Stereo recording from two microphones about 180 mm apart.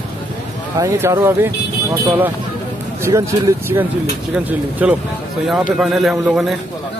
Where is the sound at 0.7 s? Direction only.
15° right (ahead or behind).